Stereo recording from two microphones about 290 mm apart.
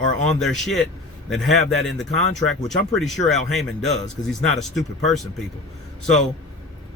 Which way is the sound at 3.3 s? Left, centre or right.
Centre.